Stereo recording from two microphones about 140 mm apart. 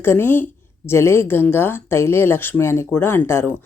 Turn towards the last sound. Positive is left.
turn(degrees=15)  # may be behind; listen again after turning